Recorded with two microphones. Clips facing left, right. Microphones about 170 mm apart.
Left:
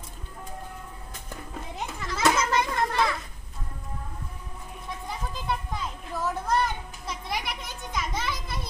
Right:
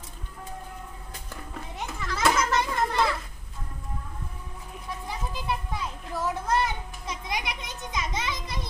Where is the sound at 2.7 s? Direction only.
5° right (ahead or behind).